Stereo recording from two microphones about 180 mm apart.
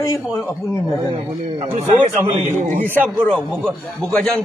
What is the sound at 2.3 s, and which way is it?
Speech, 45° right (ahead or behind).